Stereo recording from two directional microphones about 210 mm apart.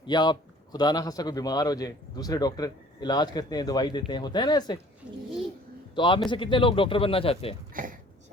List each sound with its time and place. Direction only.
0.0 s a man's voice: 20° left (ahead or behind)
5.9 s a man's voice: 20° left (ahead or behind)
7.7 s a sound: 40° right (ahead or behind)